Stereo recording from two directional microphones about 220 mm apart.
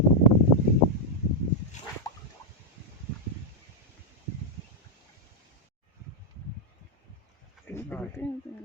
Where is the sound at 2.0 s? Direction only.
15° left (ahead or behind).